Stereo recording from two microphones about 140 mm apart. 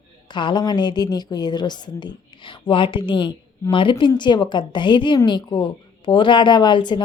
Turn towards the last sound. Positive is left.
turn(degrees=35)  # may be behind; listen again after turning